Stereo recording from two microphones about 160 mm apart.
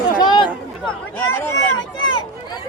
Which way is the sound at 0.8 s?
10° left (ahead or behind).